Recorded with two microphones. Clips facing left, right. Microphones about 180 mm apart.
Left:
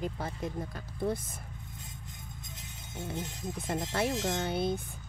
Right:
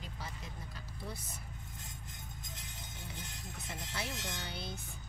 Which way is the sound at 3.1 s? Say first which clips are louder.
Left 13 dB; 50° left (ahead or behind).